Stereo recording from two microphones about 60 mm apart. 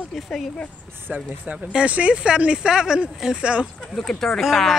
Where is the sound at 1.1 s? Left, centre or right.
Centre.